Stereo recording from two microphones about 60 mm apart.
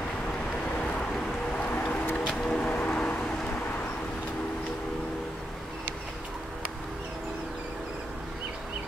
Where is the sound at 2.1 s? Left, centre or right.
Centre.